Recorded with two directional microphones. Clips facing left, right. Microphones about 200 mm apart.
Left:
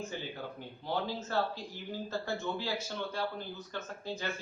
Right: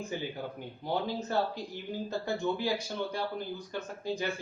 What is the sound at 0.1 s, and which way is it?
Speech, 15° right (ahead or behind).